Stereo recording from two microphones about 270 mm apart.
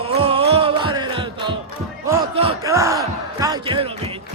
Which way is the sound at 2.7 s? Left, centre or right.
Centre.